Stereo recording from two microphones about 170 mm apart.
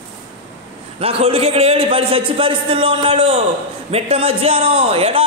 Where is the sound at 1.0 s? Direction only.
35° right (ahead or behind).